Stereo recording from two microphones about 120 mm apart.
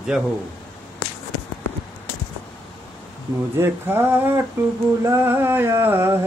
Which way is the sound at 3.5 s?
20° right (ahead or behind).